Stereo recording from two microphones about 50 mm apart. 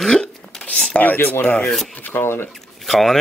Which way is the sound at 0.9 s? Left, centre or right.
Left.